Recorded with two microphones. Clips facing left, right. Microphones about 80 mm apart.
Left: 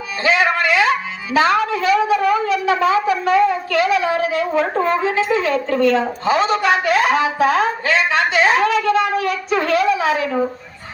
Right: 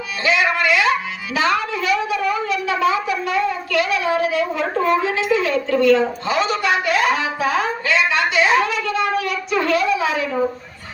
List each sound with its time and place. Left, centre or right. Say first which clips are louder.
0.2 s music: left 2 dB; left
1.7 s wind instrument: left 5 dB; left